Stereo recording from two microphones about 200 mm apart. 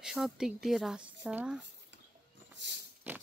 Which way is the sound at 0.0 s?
5° right (ahead or behind).